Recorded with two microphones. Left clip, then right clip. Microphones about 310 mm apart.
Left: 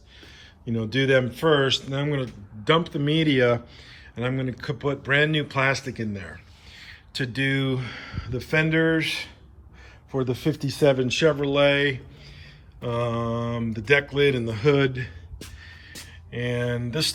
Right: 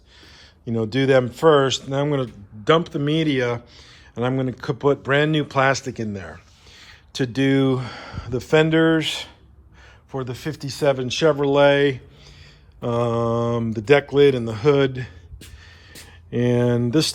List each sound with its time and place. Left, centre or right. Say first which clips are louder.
0.6 s speech: right 3 dB; centre
16.4 s speech: right 7 dB; centre